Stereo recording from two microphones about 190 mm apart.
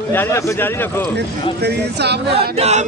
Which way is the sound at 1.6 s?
60° right (ahead or behind).